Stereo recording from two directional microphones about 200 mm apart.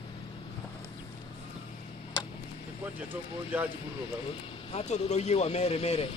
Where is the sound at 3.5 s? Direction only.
10° right (ahead or behind).